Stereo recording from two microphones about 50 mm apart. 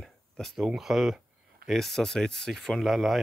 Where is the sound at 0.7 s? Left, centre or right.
Centre.